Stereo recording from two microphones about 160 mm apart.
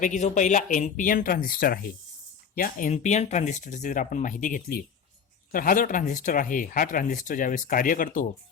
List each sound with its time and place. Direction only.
0.0 s speech: 45° left (ahead or behind)